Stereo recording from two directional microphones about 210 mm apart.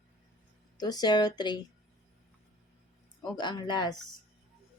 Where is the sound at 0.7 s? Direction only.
20° left (ahead or behind).